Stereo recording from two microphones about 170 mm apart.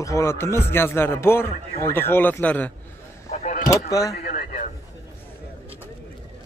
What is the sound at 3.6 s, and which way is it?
Speech, 20° left (ahead or behind).